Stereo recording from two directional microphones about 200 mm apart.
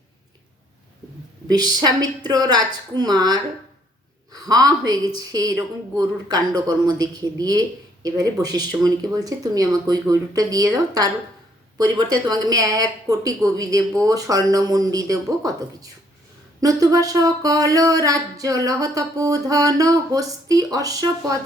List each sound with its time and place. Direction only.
1.5 s speech: 20° right (ahead or behind)
4.3 s a sound: 20° right (ahead or behind)
4.9 s a woman's voice: 20° right (ahead or behind)